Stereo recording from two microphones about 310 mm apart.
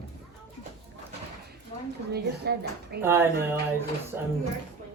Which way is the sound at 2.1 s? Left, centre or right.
Right.